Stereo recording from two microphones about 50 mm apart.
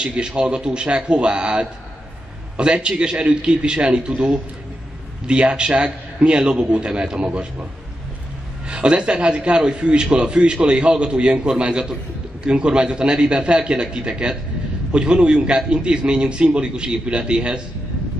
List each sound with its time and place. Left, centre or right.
0.0 s a man's voice: centre
8.6 s a man's voice: right